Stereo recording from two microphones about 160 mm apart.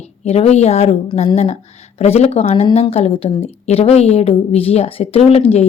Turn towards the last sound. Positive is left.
turn(degrees=40)  # may be behind; listen again after turning